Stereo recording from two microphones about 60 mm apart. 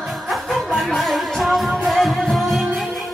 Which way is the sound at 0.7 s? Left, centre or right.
Centre.